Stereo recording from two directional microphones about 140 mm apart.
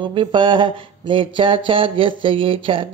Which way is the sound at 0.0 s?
35° right (ahead or behind).